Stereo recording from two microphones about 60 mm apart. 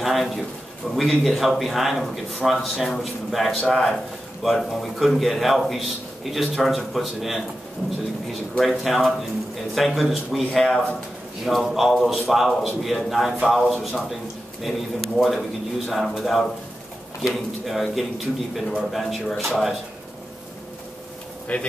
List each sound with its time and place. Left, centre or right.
0.0 s a man's voice: centre
15.0 s a man's voice: centre
21.5 s speech: left